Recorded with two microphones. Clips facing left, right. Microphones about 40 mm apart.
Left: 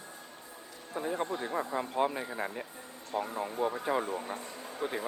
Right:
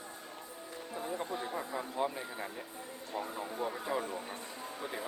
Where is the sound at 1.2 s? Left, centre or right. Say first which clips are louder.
Left 4 dB; left.